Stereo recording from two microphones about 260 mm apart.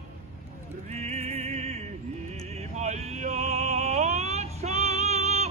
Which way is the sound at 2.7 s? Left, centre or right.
Right.